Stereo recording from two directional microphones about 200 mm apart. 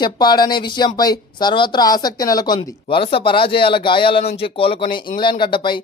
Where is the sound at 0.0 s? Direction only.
20° left (ahead or behind).